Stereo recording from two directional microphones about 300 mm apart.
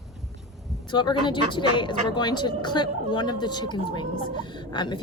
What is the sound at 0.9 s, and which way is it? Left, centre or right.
Speech, centre.